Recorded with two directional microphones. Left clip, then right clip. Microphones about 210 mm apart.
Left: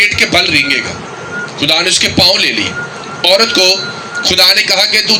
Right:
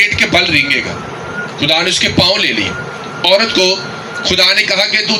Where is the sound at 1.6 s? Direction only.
50° left (ahead or behind).